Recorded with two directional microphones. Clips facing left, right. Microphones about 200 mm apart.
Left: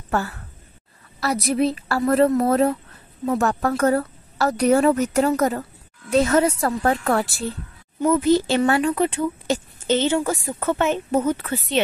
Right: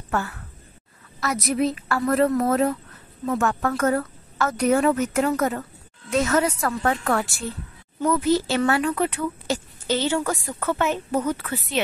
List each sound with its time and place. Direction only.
0.1 s a woman's voice: 35° left (ahead or behind)